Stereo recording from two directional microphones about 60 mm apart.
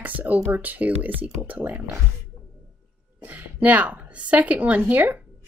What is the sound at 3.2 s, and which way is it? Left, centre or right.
A woman's voice, right.